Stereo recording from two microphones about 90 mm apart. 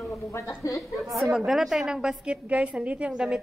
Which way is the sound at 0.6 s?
40° left (ahead or behind).